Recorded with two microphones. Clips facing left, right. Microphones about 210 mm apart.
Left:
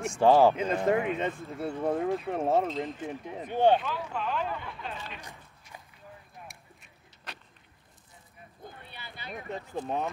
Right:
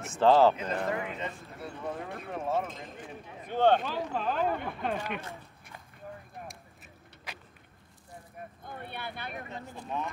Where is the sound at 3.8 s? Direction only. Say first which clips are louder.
Right 2 dB; 35° right (ahead or behind); by 5.2 s 55° right (ahead or behind).